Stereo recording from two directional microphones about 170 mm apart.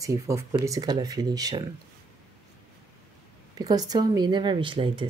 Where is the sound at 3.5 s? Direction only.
20° right (ahead or behind).